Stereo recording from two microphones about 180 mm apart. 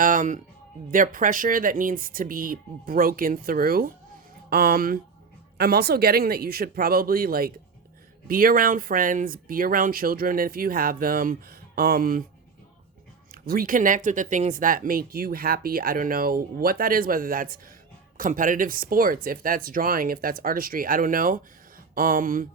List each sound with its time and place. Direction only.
0.0 s speech: 50° right (ahead or behind)
13.5 s speech: 50° right (ahead or behind)